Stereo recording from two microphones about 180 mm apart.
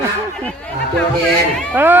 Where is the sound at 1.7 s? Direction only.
10° right (ahead or behind).